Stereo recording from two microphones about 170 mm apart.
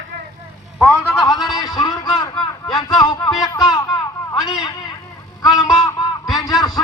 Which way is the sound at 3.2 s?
Centre (ahead or behind).